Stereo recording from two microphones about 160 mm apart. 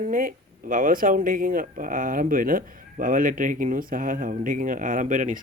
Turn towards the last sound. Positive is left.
turn(degrees=-55)  # may be behind; listen again after turning